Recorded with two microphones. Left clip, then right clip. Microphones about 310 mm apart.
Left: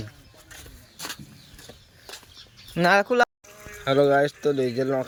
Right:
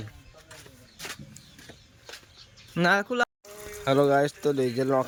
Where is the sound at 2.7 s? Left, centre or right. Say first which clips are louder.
Left 4 dB; centre.